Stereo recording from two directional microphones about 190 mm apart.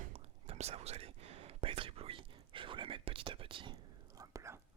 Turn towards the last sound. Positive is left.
turn(degrees=-15)  # may be behind; listen again after turning